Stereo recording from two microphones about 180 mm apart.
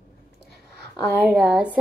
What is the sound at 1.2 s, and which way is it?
Speech, 5° right (ahead or behind).